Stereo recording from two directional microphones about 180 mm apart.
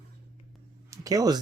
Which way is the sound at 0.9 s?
20° right (ahead or behind).